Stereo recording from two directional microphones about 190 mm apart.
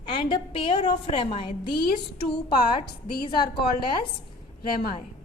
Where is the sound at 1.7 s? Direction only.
55° left (ahead or behind).